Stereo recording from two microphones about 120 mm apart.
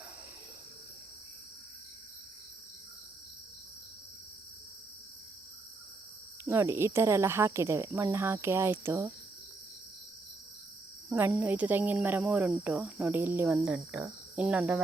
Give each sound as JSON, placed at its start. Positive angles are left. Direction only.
{"t": 6.4, "sound": "speech", "side_deg": -20}
{"t": 11.1, "sound": "cricket", "side_deg": -15}
{"t": 13.6, "sound": "cricket", "side_deg": -5}